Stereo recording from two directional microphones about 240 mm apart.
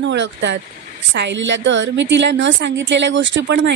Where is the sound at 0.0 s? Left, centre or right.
Right.